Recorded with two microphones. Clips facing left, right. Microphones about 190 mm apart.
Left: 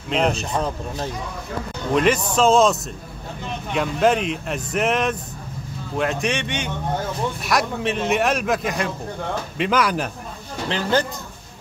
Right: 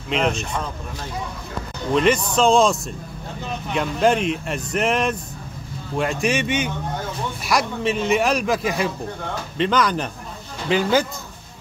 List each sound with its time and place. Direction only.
0.3 s speech: 35° left (ahead or behind)
2.0 s speech: 5° left (ahead or behind)
10.7 s a man's voice: 10° right (ahead or behind)